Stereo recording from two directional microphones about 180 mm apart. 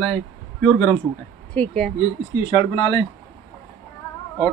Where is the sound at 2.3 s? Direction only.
35° left (ahead or behind).